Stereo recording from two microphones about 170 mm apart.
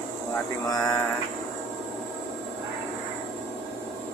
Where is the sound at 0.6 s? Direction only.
20° left (ahead or behind).